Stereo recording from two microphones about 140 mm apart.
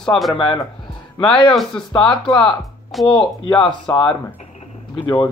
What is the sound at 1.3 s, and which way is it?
Speech, 35° left (ahead or behind).